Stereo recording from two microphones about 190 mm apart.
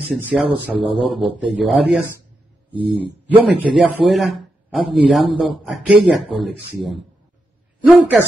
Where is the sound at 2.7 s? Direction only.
25° right (ahead or behind).